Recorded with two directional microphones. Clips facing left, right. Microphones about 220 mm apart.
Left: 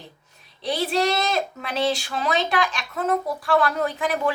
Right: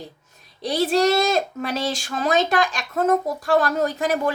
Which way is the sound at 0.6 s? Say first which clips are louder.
Right 4 dB; 45° right (ahead or behind).